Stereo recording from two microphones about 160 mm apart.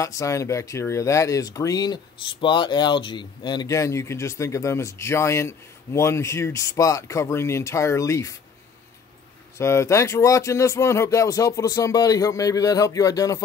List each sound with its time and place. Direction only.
0.0 s speech: 20° left (ahead or behind)
9.6 s speech: 20° left (ahead or behind)